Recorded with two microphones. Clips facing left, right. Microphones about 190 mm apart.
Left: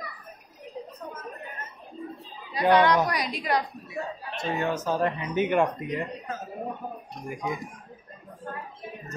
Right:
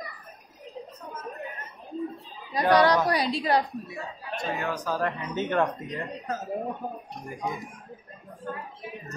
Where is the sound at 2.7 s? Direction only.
40° right (ahead or behind).